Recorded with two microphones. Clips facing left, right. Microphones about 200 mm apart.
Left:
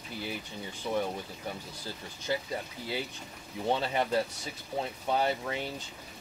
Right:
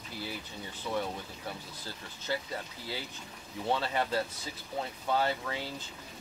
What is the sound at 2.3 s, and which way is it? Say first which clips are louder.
Speech: left 2 dB; 15° left (ahead or behind).